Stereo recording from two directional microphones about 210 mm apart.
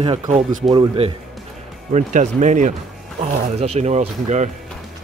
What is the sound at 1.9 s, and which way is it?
Speech, 35° right (ahead or behind).